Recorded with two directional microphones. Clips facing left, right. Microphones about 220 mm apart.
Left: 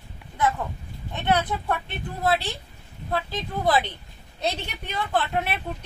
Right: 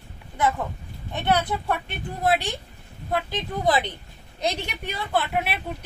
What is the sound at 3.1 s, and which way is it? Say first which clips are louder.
A woman's voice: right 1 dB; 15° right (ahead or behind).